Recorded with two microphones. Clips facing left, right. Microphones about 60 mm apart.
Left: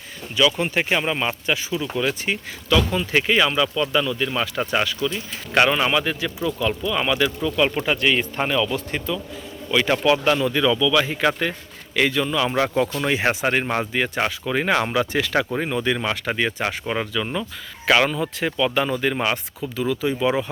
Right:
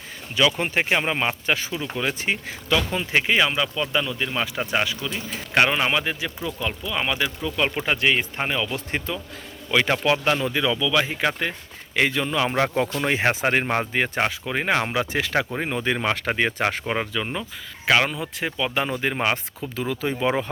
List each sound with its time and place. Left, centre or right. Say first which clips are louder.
0.6 s speech: left 1 dB; right
8.9 s speech: left 2 dB; right
10.5 s speech: left 3 dB; centre; by 16.9 s right
16.9 s speech: left 1 dB; right
17.8 s speech: left 2 dB; centre
18.5 s speech: left 3 dB; right